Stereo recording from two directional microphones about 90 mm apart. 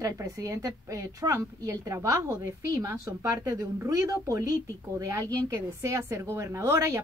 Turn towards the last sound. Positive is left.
turn(degrees=-35)  # may be behind; listen again after turning